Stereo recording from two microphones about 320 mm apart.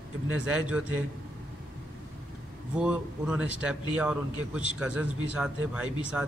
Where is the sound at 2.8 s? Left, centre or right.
Centre.